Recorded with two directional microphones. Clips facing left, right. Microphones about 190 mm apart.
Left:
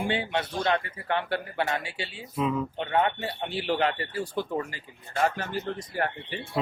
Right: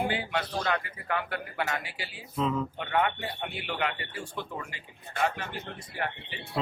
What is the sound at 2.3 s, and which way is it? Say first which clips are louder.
Speech: left 1 dB; 10° left (ahead or behind).